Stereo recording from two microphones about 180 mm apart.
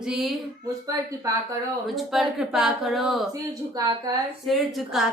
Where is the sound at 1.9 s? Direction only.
Centre (ahead or behind).